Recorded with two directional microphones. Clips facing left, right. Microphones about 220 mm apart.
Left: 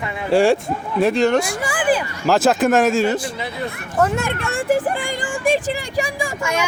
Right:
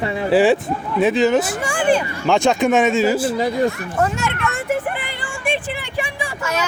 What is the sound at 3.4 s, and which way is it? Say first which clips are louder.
Speech: right 9 dB; 40° right (ahead or behind).